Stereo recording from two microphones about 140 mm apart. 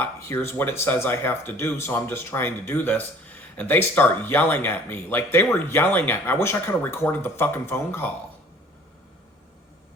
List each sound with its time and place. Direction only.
0.0 s speech: 15° left (ahead or behind)